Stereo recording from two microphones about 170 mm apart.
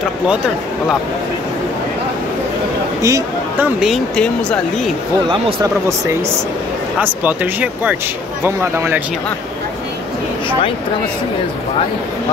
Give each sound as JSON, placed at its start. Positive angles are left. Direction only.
{"t": 3.0, "sound": "speech", "side_deg": -20}
{"t": 3.8, "sound": "speech", "side_deg": 5}
{"t": 5.3, "sound": "speech", "side_deg": -20}
{"t": 7.0, "sound": "speech", "side_deg": -10}